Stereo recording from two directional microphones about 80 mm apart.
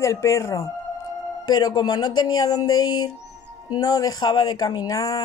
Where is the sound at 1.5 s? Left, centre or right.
Left.